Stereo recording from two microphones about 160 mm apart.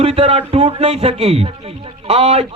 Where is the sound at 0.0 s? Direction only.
40° right (ahead or behind).